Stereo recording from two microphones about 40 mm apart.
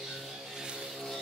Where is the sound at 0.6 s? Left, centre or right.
Right.